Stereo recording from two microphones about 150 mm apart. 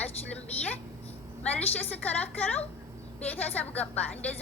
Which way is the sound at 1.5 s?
10° left (ahead or behind).